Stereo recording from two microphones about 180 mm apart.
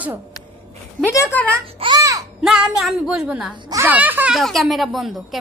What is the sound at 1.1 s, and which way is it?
Speech, 15° left (ahead or behind).